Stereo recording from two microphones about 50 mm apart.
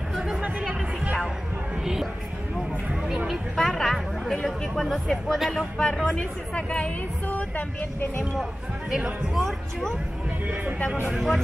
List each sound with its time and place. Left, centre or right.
0.4 s music: right
3.5 s speech: centre
5.3 s speech: centre
5.8 s speech: centre
6.0 s speech: left
7.2 s speech: left
9.3 s speech: centre
11.1 s speech: centre